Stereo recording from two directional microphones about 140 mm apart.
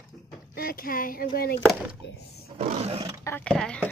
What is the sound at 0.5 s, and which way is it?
Speech, 90° left.